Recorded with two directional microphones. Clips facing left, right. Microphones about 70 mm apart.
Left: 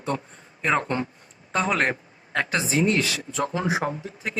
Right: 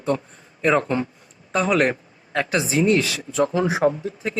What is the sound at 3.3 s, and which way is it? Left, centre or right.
Speech, right.